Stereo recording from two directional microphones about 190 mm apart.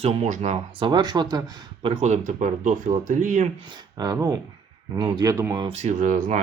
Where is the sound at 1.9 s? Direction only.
35° right (ahead or behind).